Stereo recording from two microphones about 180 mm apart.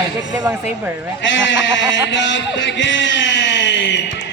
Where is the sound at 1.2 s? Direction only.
90° left; by 4.3 s 75° left (ahead or behind).